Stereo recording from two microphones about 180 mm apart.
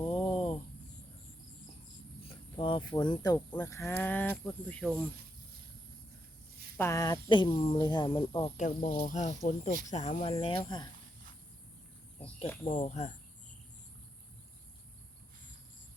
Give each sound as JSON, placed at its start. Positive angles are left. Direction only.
{"t": 0.1, "sound": "a sound", "side_deg": 30}
{"t": 2.2, "sound": "speech", "side_deg": 30}
{"t": 6.7, "sound": "speech", "side_deg": 15}
{"t": 8.5, "sound": "speech", "side_deg": 45}
{"t": 12.6, "sound": "speech", "side_deg": 45}